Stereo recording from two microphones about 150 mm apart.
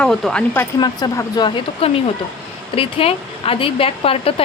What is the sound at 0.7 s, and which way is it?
Speech, 25° left (ahead or behind).